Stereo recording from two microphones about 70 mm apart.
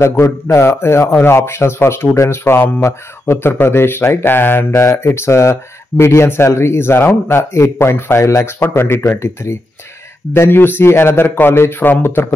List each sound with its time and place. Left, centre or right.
0.0 s speech: left